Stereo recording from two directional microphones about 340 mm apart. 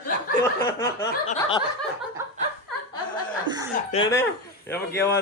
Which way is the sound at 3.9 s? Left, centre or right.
Centre.